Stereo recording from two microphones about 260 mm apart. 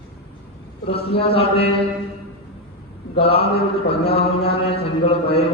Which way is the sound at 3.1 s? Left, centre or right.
Left.